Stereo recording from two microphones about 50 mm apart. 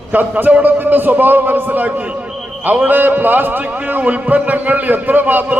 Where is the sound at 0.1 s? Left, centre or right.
Right.